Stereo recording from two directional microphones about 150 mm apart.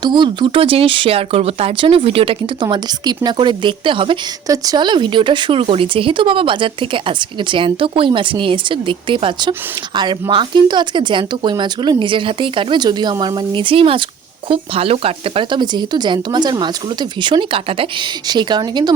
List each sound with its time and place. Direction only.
0.0 s speech: 30° right (ahead or behind)
4.4 s speech: 25° right (ahead or behind)